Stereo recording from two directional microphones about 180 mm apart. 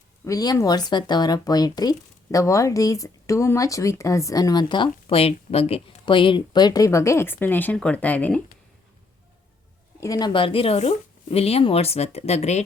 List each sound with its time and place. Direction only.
0.3 s speech: 20° left (ahead or behind)
10.0 s speech: 20° left (ahead or behind); by 12.6 s 40° left (ahead or behind)